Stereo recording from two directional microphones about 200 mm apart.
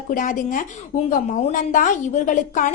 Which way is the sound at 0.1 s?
40° left (ahead or behind).